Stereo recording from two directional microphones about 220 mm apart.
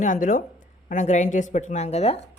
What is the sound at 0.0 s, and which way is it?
A woman's voice, 35° left (ahead or behind).